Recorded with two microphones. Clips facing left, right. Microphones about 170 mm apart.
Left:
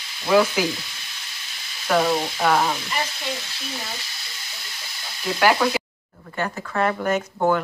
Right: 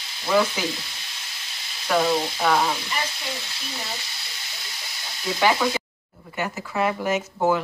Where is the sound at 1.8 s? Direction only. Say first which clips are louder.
Left 1 dB; 5° left (ahead or behind).